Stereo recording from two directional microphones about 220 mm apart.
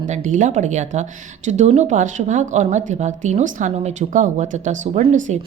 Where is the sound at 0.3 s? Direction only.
35° right (ahead or behind).